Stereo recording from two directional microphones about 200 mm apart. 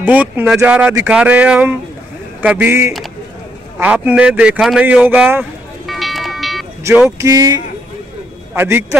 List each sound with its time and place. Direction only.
0.0 s speech: 5° right (ahead or behind)
6.8 s speech: 15° right (ahead or behind)